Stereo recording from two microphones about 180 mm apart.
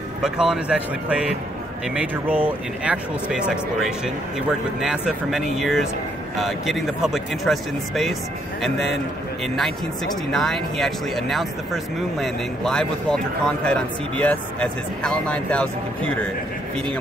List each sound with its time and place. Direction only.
0.2 s speech: 5° right (ahead or behind)